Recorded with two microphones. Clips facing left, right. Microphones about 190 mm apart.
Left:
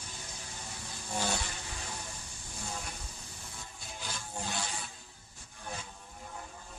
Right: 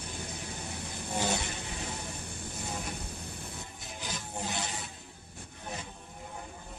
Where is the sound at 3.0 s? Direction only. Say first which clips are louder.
Right 7 dB; 60° right (ahead or behind).